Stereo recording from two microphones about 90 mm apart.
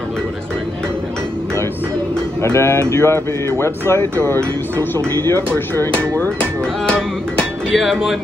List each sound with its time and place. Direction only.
2.4 s speech: 30° left (ahead or behind)
7.7 s speech: centre (ahead or behind)